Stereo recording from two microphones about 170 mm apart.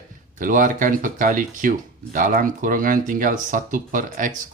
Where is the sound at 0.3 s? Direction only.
50° right (ahead or behind).